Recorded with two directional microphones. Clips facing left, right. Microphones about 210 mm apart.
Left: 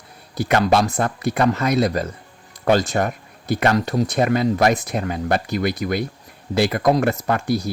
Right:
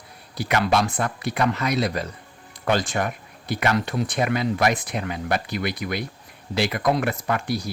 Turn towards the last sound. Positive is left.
turn(degrees=45)  # may be behind; listen again after turning